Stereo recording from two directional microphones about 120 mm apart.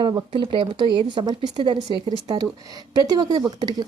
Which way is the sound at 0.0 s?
40° right (ahead or behind).